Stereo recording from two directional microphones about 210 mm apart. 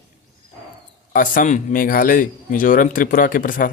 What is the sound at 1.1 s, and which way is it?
A man's voice, 40° left (ahead or behind).